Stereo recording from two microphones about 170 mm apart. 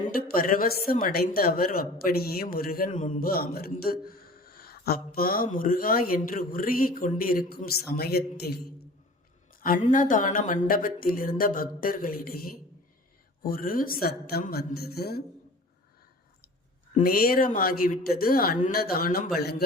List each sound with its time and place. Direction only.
0.1 s speech: 60° left (ahead or behind)
9.6 s a sound: 60° left (ahead or behind)
9.8 s speech: 50° left (ahead or behind); by 15.2 s 70° left (ahead or behind)
17.0 s speech: 60° left (ahead or behind)
19.4 s a man's voice: 70° left (ahead or behind)